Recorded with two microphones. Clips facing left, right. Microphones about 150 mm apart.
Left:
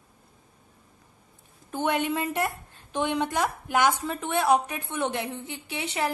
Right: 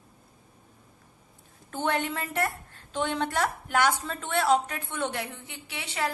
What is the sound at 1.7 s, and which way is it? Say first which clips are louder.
A woman's voice: left 3 dB; 15° left (ahead or behind).